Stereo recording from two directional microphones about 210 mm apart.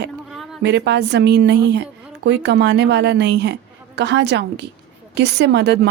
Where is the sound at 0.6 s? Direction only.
55° right (ahead or behind).